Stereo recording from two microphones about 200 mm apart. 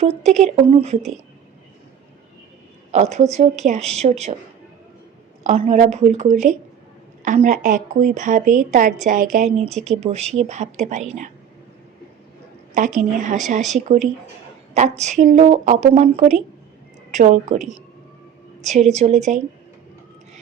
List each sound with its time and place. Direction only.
0.0 s a woman's voice: 35° right (ahead or behind)
2.9 s a woman's voice: 35° right (ahead or behind)
5.4 s a woman's voice: 35° right (ahead or behind)
12.7 s a woman's voice: 40° right (ahead or behind)